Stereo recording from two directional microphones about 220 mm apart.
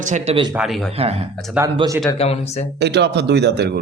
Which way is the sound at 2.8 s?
50° right (ahead or behind).